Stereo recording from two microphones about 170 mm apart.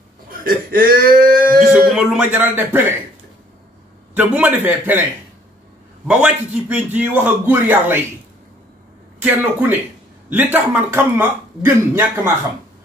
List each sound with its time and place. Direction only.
0.4 s a sound: 60° right (ahead or behind)
1.7 s speech: 5° right (ahead or behind)
4.1 s a man's voice: 10° right (ahead or behind)
6.0 s a man's voice: 10° right (ahead or behind)
9.2 s a man's voice: 10° right (ahead or behind)